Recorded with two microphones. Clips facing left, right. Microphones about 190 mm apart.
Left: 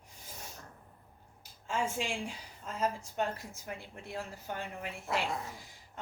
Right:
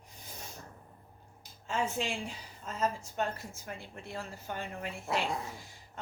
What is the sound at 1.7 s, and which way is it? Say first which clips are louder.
A woman's voice: right 1 dB; 10° left (ahead or behind).